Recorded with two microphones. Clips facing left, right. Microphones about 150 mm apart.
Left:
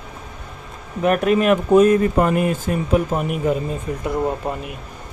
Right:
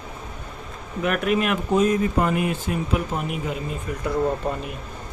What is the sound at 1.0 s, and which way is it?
Speech, 40° left (ahead or behind).